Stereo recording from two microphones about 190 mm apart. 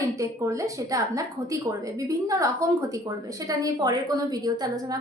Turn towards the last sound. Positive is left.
turn(degrees=-20)  # may be behind; listen again after turning